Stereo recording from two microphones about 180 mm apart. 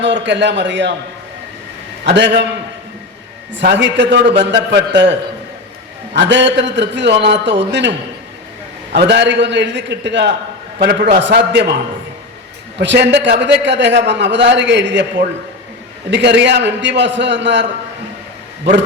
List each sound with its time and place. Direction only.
0.0 s a man's voice: 80° right
2.0 s a man's voice: 75° right (ahead or behind)
3.5 s a man's voice: 75° right (ahead or behind)
6.1 s a man's voice: 80° right
12.8 s a man's voice: 75° right (ahead or behind)